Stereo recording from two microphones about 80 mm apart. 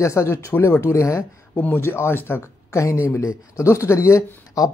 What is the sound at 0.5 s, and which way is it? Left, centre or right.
Speech, left.